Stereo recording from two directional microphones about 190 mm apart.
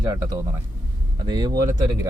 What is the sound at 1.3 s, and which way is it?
Speech, 20° right (ahead or behind).